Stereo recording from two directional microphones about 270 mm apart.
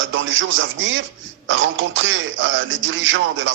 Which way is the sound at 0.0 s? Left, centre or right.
Right.